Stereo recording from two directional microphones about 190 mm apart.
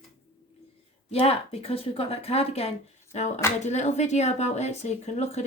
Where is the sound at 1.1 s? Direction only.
30° left (ahead or behind).